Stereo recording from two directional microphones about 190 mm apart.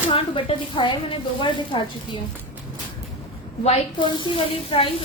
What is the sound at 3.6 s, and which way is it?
A woman's voice, 30° left (ahead or behind).